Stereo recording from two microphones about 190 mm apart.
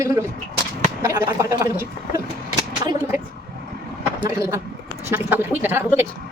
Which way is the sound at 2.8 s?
20° right (ahead or behind).